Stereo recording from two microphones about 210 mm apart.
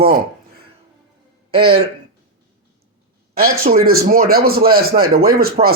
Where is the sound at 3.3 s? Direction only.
45° right (ahead or behind).